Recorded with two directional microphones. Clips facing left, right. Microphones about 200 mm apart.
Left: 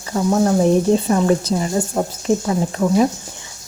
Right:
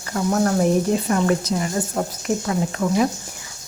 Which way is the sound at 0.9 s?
30° left (ahead or behind).